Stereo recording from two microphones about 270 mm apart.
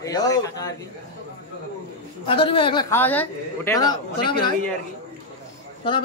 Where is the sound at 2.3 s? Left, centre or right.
Centre.